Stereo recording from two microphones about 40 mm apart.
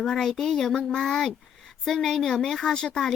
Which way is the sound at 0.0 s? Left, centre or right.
Centre.